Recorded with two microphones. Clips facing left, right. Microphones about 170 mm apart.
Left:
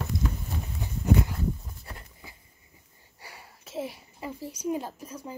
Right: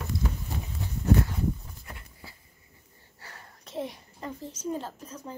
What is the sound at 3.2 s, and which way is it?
Speech, 10° left (ahead or behind).